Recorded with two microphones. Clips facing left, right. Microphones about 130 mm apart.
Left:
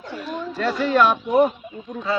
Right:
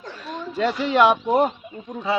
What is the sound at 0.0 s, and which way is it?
Chatter, 5° left (ahead or behind).